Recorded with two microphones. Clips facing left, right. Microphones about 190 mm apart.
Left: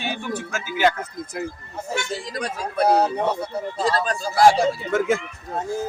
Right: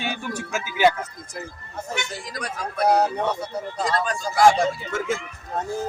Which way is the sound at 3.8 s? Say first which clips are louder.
Left 2 dB; 30° left (ahead or behind).